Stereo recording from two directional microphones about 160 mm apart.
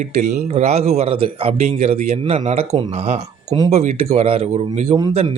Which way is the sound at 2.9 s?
45° right (ahead or behind).